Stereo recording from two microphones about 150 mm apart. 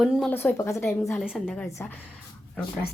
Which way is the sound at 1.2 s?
Centre (ahead or behind).